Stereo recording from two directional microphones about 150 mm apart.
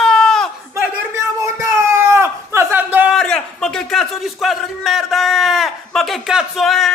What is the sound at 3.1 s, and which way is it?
A man's voice, 5° left (ahead or behind).